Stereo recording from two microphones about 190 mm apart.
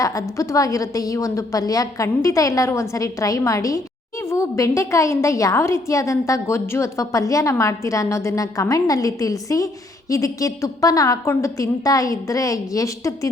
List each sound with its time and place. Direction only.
0.0 s a woman's voice: 15° left (ahead or behind)